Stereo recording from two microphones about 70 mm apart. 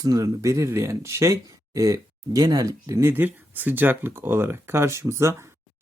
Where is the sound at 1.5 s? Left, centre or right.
Right.